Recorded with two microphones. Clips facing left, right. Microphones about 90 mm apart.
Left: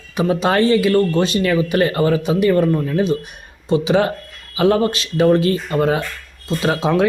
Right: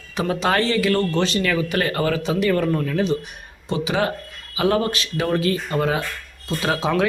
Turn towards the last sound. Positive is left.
turn(degrees=20)  # may be behind; listen again after turning